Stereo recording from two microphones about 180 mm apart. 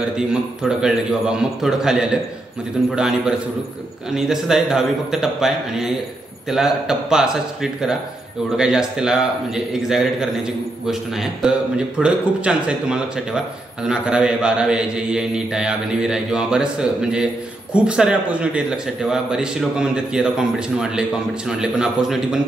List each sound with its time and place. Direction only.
0.3 s a man's voice: 5° right (ahead or behind)